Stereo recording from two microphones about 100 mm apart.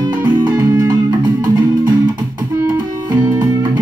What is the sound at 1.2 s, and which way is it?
Music, 45° right (ahead or behind).